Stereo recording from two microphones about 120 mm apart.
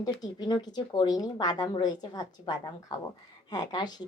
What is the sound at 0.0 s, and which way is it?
A woman's voice, 35° left (ahead or behind).